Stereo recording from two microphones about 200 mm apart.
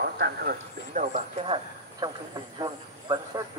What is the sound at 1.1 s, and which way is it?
Speech, 25° right (ahead or behind).